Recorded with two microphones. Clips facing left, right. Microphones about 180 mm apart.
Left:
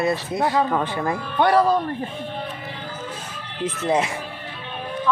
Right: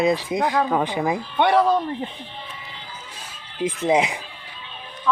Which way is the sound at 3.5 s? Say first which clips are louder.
Right 2 dB; 15° right (ahead or behind).